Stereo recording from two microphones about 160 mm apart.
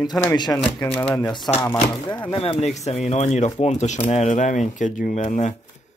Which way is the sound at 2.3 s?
35° left (ahead or behind).